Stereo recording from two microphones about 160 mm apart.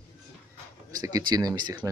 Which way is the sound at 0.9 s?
20° right (ahead or behind).